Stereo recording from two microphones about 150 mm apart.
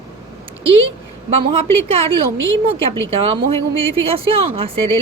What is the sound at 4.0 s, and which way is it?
Speech, 40° right (ahead or behind).